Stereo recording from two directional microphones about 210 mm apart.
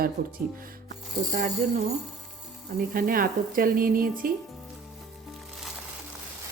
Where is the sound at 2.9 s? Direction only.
45° right (ahead or behind).